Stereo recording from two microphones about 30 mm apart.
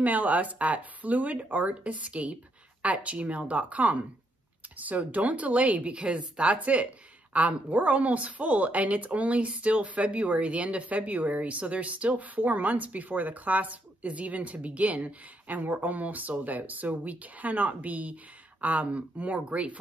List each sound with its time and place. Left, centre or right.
0.0 s speech: right
1.8 s speech: right